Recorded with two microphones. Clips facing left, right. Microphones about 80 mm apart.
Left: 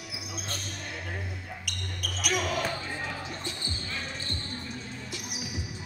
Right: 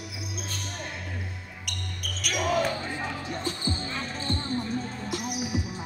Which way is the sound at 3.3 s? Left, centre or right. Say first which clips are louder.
Right 7 dB; right.